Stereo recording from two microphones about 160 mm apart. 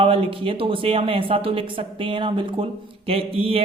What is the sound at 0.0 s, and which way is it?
Speech, 35° right (ahead or behind).